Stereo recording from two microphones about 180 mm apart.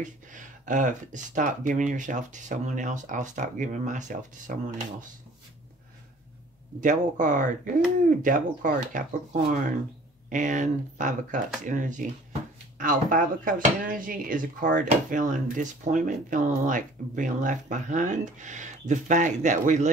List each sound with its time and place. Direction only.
0.0 s speech: 45° right (ahead or behind)
6.8 s speech: 45° right (ahead or behind)